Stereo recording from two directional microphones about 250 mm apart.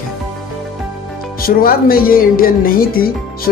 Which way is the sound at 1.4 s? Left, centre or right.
Left.